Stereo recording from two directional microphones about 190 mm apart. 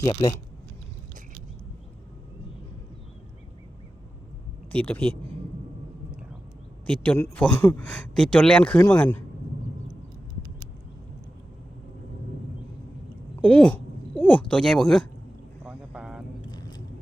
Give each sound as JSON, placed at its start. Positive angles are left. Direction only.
{"t": 0.0, "sound": "speech", "side_deg": 20}
{"t": 4.7, "sound": "speech", "side_deg": 10}
{"t": 6.8, "sound": "speech", "side_deg": 5}
{"t": 13.4, "sound": "speech", "side_deg": 5}
{"t": 15.6, "sound": "vehicle", "side_deg": -5}
{"t": 16.5, "sound": "vehicle", "side_deg": 20}